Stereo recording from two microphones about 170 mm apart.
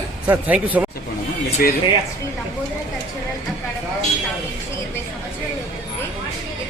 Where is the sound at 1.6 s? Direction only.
60° left (ahead or behind).